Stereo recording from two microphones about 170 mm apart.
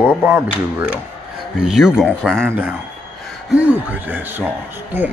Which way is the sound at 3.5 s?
10° right (ahead or behind).